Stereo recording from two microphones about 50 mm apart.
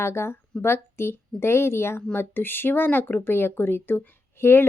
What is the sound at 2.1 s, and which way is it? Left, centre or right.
Speech, left.